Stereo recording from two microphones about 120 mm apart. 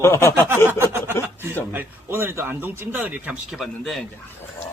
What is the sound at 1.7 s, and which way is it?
Speech, 20° right (ahead or behind).